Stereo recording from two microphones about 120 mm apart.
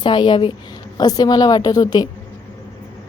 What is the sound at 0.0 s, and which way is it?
A woman's voice, 40° left (ahead or behind).